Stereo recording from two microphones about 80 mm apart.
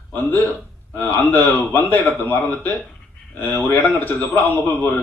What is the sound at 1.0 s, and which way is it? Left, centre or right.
A man's voice, left.